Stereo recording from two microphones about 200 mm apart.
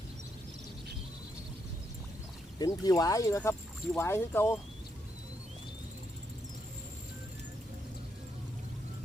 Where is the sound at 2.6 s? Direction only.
20° left (ahead or behind).